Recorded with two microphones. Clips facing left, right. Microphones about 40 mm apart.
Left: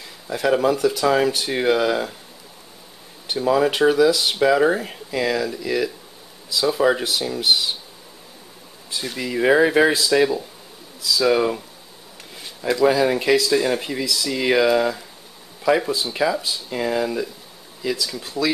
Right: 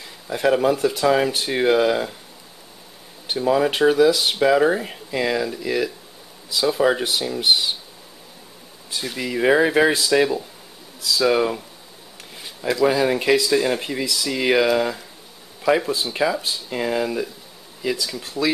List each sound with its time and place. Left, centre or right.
0.0 s speech: centre
0.7 s speech: centre
1.0 s speech: centre
3.3 s speech: centre
8.9 s speech: centre